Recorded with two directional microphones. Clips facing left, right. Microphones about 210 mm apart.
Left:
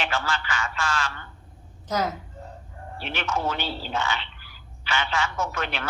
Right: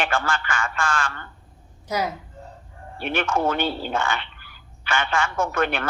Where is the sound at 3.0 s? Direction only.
50° right (ahead or behind).